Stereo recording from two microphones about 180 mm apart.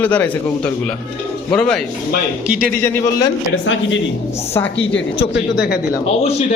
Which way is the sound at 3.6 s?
90° left.